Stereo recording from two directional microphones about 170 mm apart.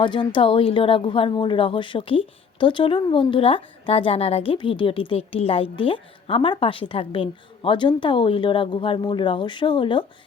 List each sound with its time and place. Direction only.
0.0 s a woman's voice: 30° left (ahead or behind)